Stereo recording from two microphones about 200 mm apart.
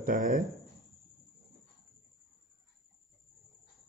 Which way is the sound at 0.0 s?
40° right (ahead or behind).